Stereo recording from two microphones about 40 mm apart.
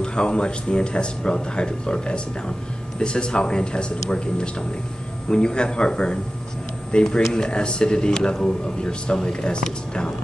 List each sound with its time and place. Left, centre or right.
0.0 s speech: left